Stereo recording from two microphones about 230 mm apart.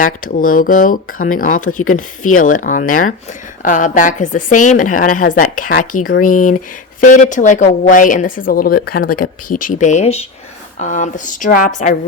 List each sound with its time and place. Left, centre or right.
0.0 s a woman's voice: left